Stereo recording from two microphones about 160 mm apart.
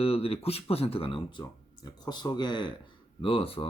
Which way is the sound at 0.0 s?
35° left (ahead or behind).